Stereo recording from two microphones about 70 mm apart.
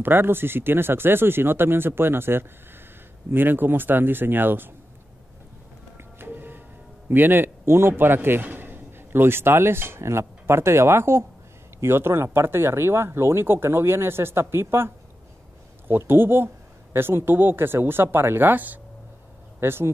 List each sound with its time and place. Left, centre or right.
0.0 s a man's voice: right
5.9 s music: right
7.1 s a man's voice: right
16.1 s speech: right